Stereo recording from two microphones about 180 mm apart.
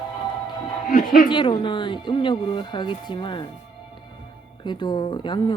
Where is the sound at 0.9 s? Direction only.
50° left (ahead or behind).